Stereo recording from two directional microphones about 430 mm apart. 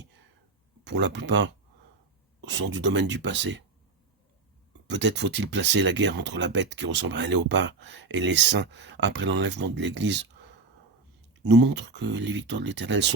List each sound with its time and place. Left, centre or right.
0.9 s speech: right
4.9 s speech: right
11.4 s speech: right